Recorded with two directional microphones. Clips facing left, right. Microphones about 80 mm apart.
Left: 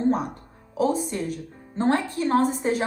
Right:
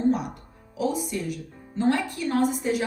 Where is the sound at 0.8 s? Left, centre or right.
Left.